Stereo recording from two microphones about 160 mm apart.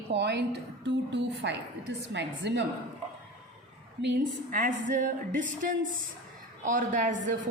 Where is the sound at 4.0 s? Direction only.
75° right (ahead or behind); by 7.4 s 55° right (ahead or behind).